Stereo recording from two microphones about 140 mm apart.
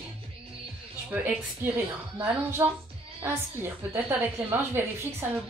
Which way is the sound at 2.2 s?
15° right (ahead or behind).